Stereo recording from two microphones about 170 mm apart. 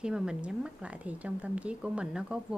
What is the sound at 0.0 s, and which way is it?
A woman's voice, 5° right (ahead or behind).